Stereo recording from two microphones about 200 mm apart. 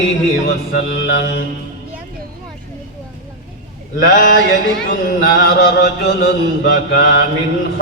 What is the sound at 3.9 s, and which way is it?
Mantra, 50° left (ahead or behind).